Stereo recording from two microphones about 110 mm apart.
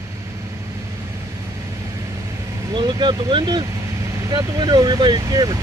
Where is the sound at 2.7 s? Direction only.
45° right (ahead or behind).